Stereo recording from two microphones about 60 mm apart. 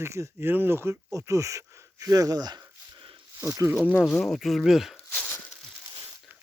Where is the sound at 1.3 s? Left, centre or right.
Right.